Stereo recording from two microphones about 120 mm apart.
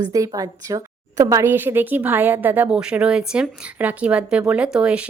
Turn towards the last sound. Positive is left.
turn(degrees=-10)  # may be behind; listen again after turning